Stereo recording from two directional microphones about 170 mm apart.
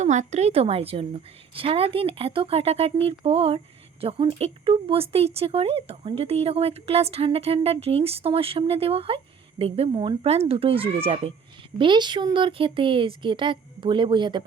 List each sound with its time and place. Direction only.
0.0 s speech: 45° right (ahead or behind); by 14.4 s 25° right (ahead or behind)